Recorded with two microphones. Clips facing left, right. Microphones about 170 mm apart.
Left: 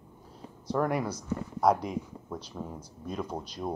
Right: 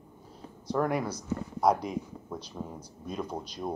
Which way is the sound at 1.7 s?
Centre (ahead or behind).